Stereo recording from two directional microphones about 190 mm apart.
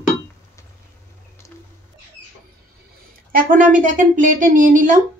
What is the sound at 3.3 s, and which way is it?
A woman's voice, 45° right (ahead or behind).